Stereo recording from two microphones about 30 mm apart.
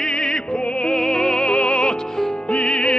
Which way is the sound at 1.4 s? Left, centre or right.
Left.